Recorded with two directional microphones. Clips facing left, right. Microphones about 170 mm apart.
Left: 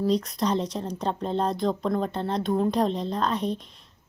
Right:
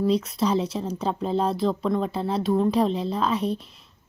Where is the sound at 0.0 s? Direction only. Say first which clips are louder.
Right 2 dB; centre (ahead or behind).